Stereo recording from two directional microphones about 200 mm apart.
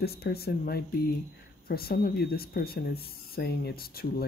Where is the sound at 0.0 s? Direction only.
50° left (ahead or behind).